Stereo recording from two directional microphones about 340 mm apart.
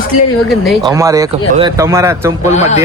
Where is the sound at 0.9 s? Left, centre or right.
Centre.